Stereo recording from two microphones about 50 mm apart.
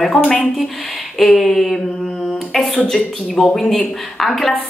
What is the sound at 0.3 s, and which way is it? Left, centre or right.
A woman's voice, centre.